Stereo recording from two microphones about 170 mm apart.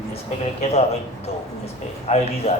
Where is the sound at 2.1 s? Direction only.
40° left (ahead or behind).